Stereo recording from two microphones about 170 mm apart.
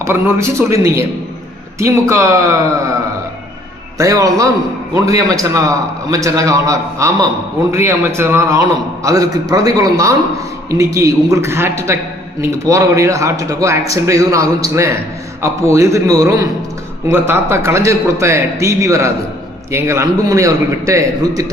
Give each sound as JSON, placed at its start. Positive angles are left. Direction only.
{"t": 0.0, "sound": "speech", "side_deg": -15}
{"t": 3.9, "sound": "a man's voice", "side_deg": -20}